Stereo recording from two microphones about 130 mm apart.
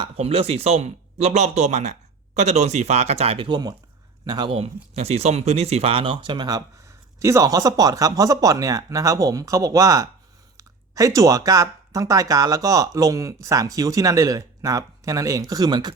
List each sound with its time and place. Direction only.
0.2 s speech: 50° right (ahead or behind); by 4.5 s 35° right (ahead or behind)
4.5 s speech: 50° right (ahead or behind); by 6.6 s 35° right (ahead or behind)
7.2 s speech: 25° right (ahead or behind)